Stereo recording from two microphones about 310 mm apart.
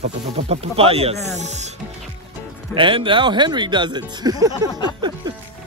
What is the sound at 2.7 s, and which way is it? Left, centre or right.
Speech, centre.